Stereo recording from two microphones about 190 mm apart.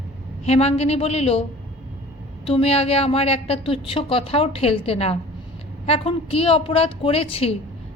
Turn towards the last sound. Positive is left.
turn(degrees=30)  # may be behind; listen again after turning